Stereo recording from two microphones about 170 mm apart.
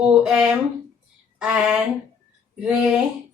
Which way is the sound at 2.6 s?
5° right (ahead or behind).